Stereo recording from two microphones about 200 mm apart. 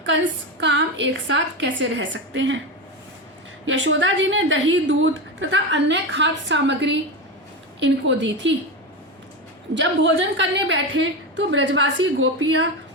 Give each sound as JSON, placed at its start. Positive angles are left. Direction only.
{"t": 0.6, "sound": "a woman's voice", "side_deg": -65}
{"t": 3.7, "sound": "a woman's voice", "side_deg": -70}
{"t": 9.7, "sound": "a woman's voice", "side_deg": -65}